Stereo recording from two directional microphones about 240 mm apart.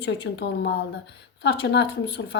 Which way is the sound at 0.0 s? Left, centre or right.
Left.